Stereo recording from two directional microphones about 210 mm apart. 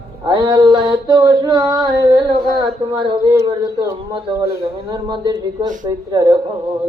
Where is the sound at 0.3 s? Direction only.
20° right (ahead or behind).